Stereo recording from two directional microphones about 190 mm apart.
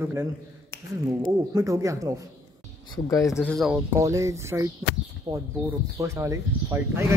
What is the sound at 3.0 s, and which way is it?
Speech, 15° left (ahead or behind).